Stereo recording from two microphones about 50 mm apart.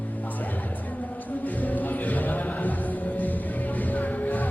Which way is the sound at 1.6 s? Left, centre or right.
Left.